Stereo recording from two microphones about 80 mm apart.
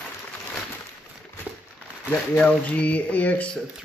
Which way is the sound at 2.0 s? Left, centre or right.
Centre.